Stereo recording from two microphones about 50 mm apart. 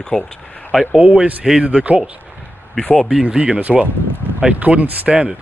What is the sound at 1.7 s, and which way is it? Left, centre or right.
Speech, right.